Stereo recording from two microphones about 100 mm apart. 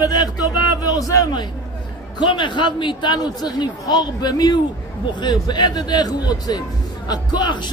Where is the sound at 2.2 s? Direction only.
50° left (ahead or behind).